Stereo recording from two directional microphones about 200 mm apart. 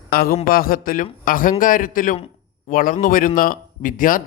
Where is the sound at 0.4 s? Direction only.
45° left (ahead or behind).